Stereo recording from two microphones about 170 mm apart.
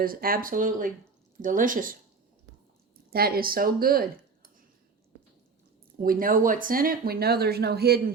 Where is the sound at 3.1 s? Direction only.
65° right (ahead or behind).